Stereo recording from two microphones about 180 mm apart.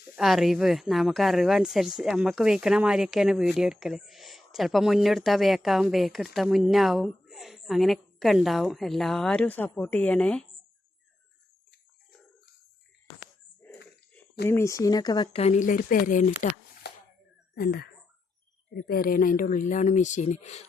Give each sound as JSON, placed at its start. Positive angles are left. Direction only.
{"t": 0.2, "sound": "speech", "side_deg": 0}
{"t": 14.4, "sound": "speech", "side_deg": 15}
{"t": 16.8, "sound": "a sound", "side_deg": 65}
{"t": 17.5, "sound": "speech", "side_deg": 60}
{"t": 18.9, "sound": "speech", "side_deg": 55}